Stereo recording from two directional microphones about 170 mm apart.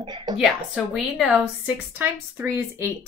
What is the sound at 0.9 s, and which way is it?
A woman's voice, 5° right (ahead or behind).